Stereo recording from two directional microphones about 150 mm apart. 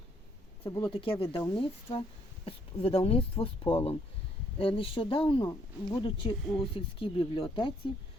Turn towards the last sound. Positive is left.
turn(degrees=35)  # may be behind; listen again after turning